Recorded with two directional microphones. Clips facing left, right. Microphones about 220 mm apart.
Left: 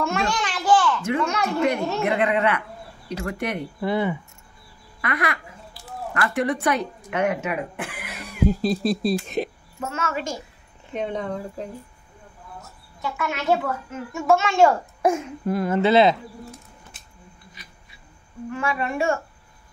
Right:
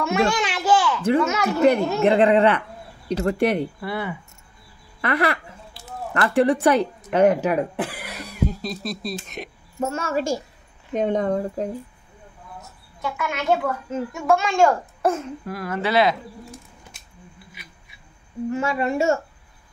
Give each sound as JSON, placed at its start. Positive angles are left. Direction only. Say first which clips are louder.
{"t": 0.0, "sound": "a woman's voice", "louder": "right 4 dB", "side_deg": -5}
{"t": 0.5, "sound": "a sound", "louder": "even", "side_deg": -10}
{"t": 1.2, "sound": "a woman's voice", "louder": "right 2 dB", "side_deg": -5}
{"t": 2.0, "sound": "speech", "louder": "right 7 dB", "side_deg": -30}
{"t": 3.8, "sound": "speech", "louder": "left 5 dB", "side_deg": 20}
{"t": 5.0, "sound": "speech", "louder": "right 5 dB", "side_deg": -30}
{"t": 8.5, "sound": "speech", "louder": "left 8 dB", "side_deg": 30}
{"t": 9.8, "sound": "speech", "louder": "right 4 dB", "side_deg": -35}
{"t": 11.0, "sound": "speech", "louder": "right 6 dB", "side_deg": -45}
{"t": 13.0, "sound": "a woman's voice", "louder": "even", "side_deg": 0}
{"t": 15.4, "sound": "speech", "louder": "left 8 dB", "side_deg": 25}
{"t": 18.5, "sound": "a woman's voice", "louder": "right 3 dB", "side_deg": -25}